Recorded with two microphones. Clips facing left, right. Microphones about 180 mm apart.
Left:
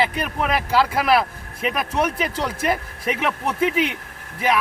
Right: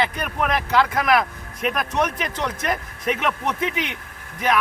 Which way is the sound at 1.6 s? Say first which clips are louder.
Even; 5° left (ahead or behind).